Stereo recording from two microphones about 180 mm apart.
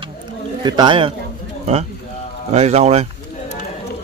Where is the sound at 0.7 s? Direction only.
25° right (ahead or behind).